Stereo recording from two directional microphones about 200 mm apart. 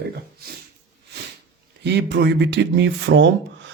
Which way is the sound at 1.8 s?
60° right (ahead or behind).